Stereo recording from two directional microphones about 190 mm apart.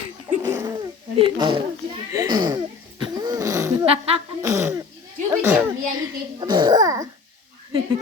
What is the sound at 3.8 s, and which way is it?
Speech, 30° right (ahead or behind).